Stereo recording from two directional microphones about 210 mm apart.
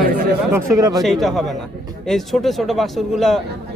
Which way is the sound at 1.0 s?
Centre (ahead or behind).